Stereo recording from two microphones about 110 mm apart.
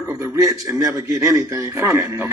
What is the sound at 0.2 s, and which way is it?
A man's voice, 30° right (ahead or behind).